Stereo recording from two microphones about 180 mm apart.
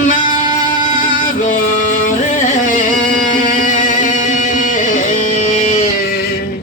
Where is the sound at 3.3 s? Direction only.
45° left (ahead or behind).